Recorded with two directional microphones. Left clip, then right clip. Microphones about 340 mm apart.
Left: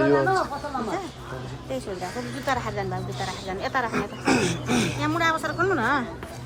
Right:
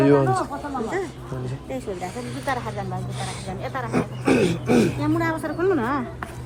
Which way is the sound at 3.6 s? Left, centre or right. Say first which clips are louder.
Left 4 dB; left.